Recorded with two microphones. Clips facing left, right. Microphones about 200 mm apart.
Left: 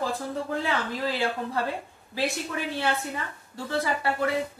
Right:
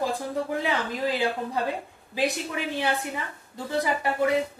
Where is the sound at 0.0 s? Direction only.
15° right (ahead or behind).